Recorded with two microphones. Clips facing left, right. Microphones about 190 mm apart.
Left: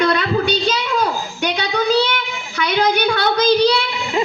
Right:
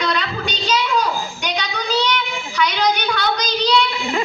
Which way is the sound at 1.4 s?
55° left (ahead or behind).